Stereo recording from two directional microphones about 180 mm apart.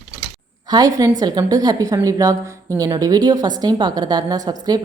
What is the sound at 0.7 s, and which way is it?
A woman's voice, 20° right (ahead or behind).